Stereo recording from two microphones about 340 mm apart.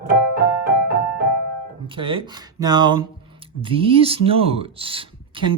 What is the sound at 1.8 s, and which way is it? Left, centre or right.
Speech, centre.